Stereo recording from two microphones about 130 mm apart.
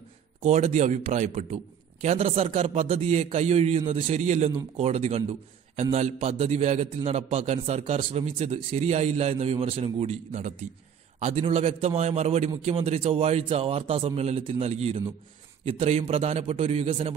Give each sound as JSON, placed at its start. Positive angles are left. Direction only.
{"t": 0.4, "sound": "a man's voice", "side_deg": -65}